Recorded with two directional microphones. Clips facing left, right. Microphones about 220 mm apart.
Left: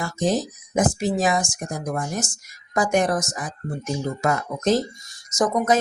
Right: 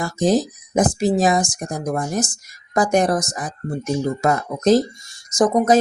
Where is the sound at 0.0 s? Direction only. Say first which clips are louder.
Right 5 dB; 35° right (ahead or behind).